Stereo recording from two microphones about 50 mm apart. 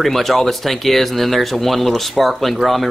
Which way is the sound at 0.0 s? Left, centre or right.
Centre.